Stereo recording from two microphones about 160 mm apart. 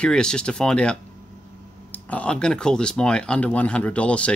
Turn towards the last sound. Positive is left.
turn(degrees=5)  # may be behind; listen again after turning